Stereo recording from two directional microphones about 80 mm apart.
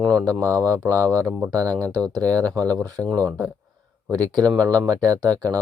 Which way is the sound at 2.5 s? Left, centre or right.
Centre.